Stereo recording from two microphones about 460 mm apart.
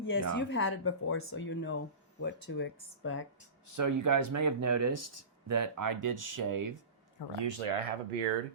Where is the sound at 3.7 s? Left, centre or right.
Right.